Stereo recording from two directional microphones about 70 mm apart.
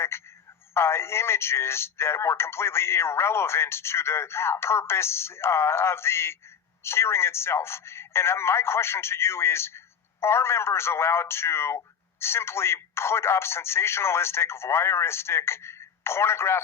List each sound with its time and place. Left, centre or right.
0.1 s a man's voice: left